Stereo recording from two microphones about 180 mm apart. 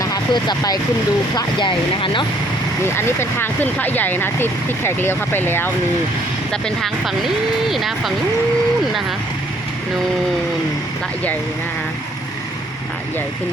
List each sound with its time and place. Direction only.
0.0 s speech: 20° left (ahead or behind)
2.8 s speech: 15° left (ahead or behind)